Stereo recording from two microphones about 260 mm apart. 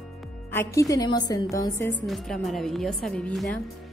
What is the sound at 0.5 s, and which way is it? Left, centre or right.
A woman's voice, centre.